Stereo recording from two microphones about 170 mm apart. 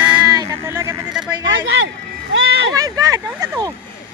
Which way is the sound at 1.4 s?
90° right.